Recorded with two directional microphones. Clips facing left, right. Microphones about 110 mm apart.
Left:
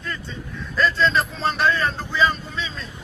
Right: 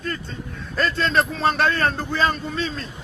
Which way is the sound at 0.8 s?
55° right (ahead or behind).